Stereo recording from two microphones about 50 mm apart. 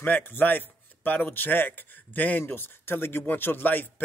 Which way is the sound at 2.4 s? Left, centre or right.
Left.